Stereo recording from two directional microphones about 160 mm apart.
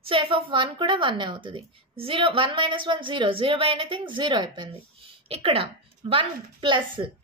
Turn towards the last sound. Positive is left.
turn(degrees=-30)  # may be behind; listen again after turning